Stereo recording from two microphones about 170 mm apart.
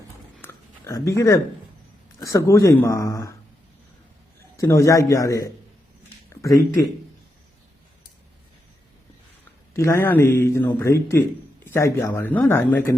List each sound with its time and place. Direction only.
0.4 s a sound: 20° left (ahead or behind)
2.1 s a man's voice: 20° left (ahead or behind)
4.5 s a man's voice: 15° left (ahead or behind)
9.7 s a man's voice: 15° left (ahead or behind)